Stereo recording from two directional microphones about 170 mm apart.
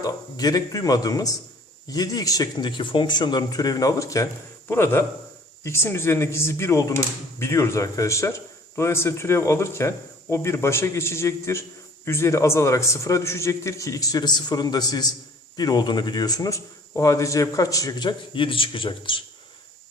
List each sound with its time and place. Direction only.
0.0 s speech: 20° left (ahead or behind)